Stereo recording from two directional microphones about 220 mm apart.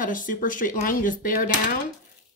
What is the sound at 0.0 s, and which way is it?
A woman's voice, 35° left (ahead or behind).